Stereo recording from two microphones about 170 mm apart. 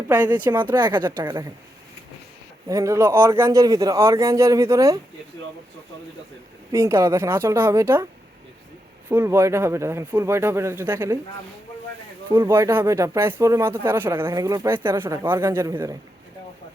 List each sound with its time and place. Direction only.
0.5 s a woman's voice: 25° right (ahead or behind)
2.6 s speech: 20° right (ahead or behind)
6.7 s speech: 15° right (ahead or behind)
9.0 s speech: 15° right (ahead or behind)
12.3 s speech: 15° right (ahead or behind)